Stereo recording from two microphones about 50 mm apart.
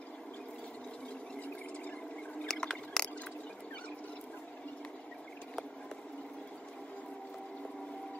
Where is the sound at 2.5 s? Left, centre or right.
Centre.